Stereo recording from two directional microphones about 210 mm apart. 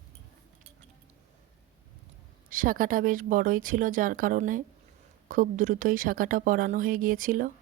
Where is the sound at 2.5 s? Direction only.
40° right (ahead or behind).